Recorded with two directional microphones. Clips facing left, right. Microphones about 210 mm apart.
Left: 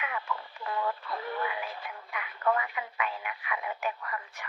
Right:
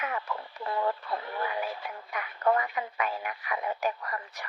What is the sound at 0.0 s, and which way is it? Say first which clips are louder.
Radio: right 2 dB; 40° right (ahead or behind).